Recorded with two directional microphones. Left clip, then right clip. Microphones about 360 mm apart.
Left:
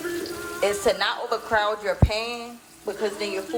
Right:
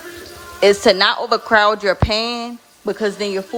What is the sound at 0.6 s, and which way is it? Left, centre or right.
A woman's voice, right.